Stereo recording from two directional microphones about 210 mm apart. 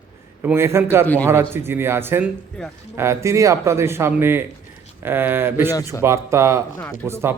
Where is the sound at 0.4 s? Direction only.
10° right (ahead or behind).